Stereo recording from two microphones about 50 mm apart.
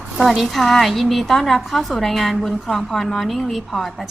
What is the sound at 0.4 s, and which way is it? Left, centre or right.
A woman's voice, centre.